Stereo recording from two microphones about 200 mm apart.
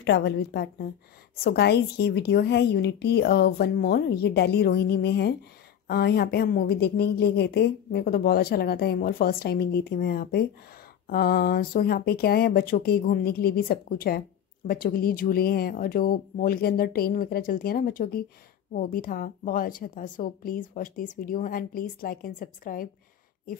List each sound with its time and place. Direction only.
0.0 s a woman's voice: 60° left (ahead or behind); by 22.8 s 45° left (ahead or behind)